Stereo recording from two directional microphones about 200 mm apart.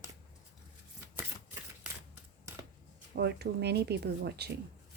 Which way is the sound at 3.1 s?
55° right (ahead or behind).